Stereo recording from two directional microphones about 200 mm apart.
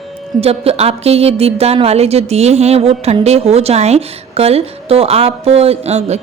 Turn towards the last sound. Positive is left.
turn(degrees=-35)  # may be behind; listen again after turning